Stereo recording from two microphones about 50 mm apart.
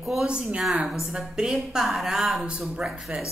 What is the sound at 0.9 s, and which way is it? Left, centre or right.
A woman's voice, centre.